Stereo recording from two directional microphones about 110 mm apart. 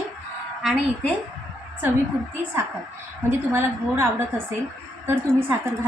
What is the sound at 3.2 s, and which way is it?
A woman's voice, 20° right (ahead or behind).